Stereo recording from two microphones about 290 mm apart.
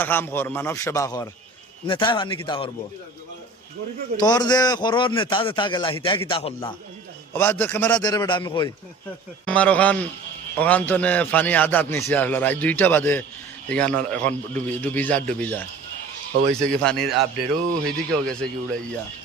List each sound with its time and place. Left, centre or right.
0.0 s a man's voice: centre
4.2 s a man's voice: centre
7.3 s a man's voice: centre
9.5 s a man's voice: centre